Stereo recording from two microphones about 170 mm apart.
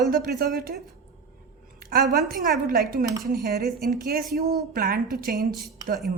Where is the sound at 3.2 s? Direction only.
65° right (ahead or behind).